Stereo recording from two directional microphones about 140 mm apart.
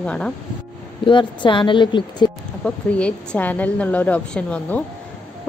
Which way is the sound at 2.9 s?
10° left (ahead or behind).